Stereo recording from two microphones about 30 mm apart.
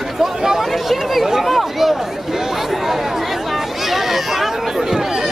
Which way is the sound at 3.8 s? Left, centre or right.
Centre.